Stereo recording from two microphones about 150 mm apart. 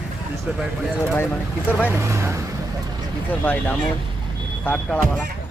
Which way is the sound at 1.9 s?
20° right (ahead or behind).